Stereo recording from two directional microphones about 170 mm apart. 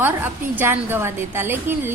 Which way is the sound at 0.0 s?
10° right (ahead or behind).